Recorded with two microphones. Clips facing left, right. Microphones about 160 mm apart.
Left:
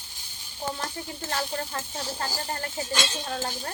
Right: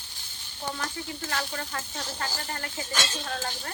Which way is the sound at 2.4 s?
30° left (ahead or behind).